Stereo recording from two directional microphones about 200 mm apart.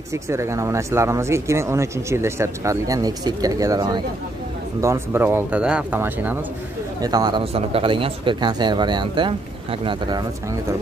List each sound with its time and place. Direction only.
0.1 s speech: 15° right (ahead or behind)